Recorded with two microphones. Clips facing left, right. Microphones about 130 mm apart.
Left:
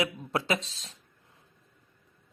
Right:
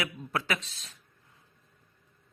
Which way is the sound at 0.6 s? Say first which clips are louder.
Left 4 dB; 90° left.